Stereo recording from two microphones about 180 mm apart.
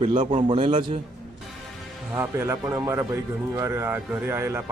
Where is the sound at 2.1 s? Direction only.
15° right (ahead or behind).